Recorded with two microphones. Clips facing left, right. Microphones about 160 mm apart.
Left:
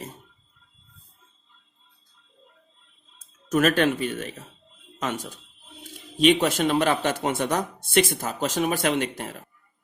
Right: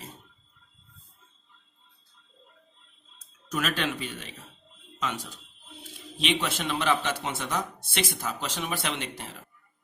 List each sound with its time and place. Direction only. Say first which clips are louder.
3.5 s speech: left 9 dB; 50° left (ahead or behind)